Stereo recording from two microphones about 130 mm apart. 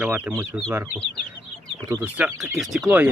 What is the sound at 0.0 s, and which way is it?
Speech, 10° right (ahead or behind).